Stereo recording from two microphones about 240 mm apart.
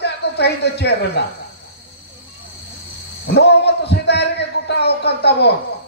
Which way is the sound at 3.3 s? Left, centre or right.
Left.